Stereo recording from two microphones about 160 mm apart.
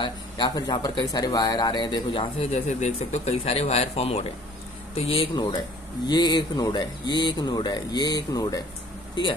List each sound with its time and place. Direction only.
0.0 s speech: 25° left (ahead or behind)
2.5 s speech: 45° left (ahead or behind); by 9.3 s 25° left (ahead or behind)